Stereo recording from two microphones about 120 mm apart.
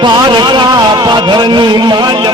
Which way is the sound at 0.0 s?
40° right (ahead or behind).